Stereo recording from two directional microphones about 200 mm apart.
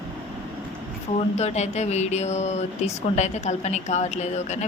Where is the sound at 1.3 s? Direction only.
35° left (ahead or behind).